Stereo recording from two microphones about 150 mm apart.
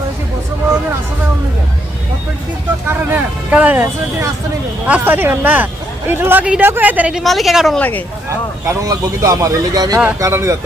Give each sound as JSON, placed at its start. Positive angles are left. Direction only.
{"t": 2.8, "sound": "speech", "side_deg": -10}
{"t": 4.9, "sound": "speech", "side_deg": -10}
{"t": 7.8, "sound": "speech", "side_deg": 10}
{"t": 8.6, "sound": "speech", "side_deg": -20}